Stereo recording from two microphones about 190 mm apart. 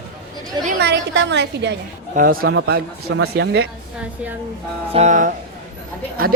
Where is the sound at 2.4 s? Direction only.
90° right; by 3.7 s 65° right (ahead or behind).